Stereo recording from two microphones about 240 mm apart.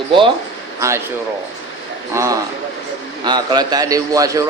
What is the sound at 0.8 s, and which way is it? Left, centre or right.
Speech, centre.